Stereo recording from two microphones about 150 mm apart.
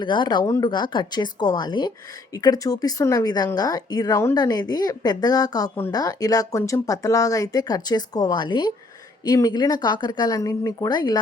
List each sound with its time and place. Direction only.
0.0 s speech: 30° left (ahead or behind)